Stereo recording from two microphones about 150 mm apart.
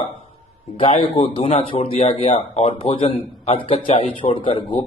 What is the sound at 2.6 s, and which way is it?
A man's voice, 35° left (ahead or behind).